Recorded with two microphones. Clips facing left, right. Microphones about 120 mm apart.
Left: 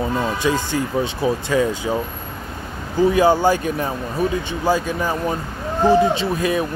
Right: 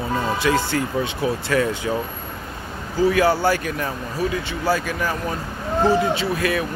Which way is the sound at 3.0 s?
20° left (ahead or behind).